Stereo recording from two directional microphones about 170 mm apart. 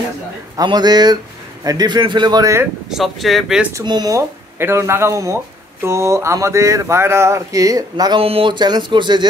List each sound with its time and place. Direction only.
0.6 s speech: 25° right (ahead or behind)
2.9 s speech: centre (ahead or behind)
3.7 s a sound: 25° right (ahead or behind)
8.2 s speech: 35° right (ahead or behind)